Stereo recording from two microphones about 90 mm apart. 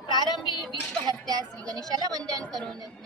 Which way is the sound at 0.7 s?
45° right (ahead or behind).